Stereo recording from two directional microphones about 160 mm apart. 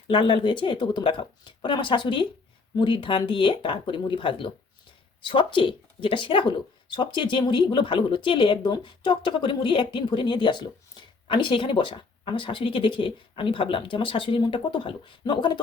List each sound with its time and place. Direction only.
0.1 s speech: 30° left (ahead or behind)